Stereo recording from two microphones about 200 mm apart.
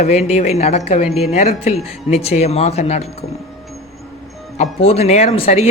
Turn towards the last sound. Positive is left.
turn(degrees=30)  # may be behind; listen again after turning